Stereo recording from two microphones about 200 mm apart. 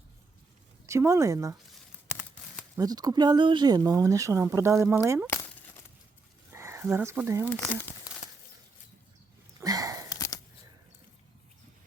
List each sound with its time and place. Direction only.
0.9 s speech: 15° right (ahead or behind)
2.6 s speech: 15° right (ahead or behind)
6.5 s speech: 15° right (ahead or behind)
7.5 s speech: 10° left (ahead or behind)
9.6 s a sound: 15° right (ahead or behind)
10.2 s a sound: 15° left (ahead or behind)